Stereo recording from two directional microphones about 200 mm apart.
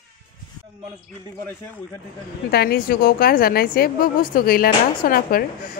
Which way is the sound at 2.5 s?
50° left (ahead or behind).